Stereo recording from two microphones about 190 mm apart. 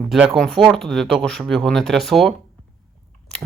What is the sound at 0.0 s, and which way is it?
Speech, centre (ahead or behind).